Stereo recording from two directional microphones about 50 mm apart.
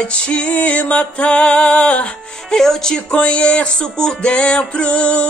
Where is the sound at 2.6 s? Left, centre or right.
Centre.